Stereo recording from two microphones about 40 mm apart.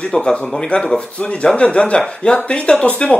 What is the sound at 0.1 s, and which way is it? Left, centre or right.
A man's voice, left.